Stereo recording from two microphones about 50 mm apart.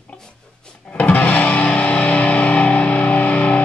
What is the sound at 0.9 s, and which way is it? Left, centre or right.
Music, left.